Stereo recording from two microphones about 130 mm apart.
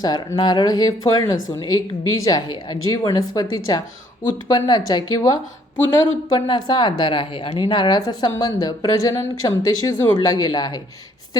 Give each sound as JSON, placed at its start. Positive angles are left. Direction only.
{"t": 0.0, "sound": "a woman's voice", "side_deg": 30}